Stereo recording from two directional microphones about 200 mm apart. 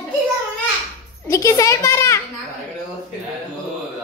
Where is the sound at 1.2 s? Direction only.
15° left (ahead or behind).